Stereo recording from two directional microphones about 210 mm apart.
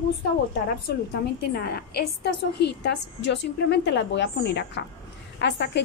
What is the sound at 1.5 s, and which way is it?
A woman's voice, 50° left (ahead or behind).